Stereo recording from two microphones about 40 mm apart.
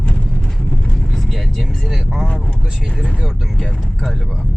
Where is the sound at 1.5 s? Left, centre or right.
Centre.